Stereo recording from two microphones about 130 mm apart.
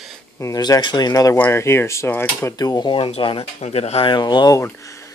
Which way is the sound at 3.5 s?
55° left (ahead or behind).